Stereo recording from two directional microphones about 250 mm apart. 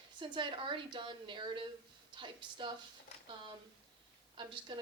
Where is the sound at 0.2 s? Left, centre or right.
Centre.